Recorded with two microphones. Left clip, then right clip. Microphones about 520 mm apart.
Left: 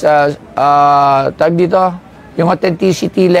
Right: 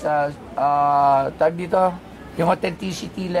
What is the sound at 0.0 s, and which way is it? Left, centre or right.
Speech, left.